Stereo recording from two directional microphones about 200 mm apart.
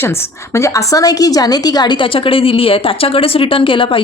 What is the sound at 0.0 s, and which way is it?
A woman's voice, 10° left (ahead or behind).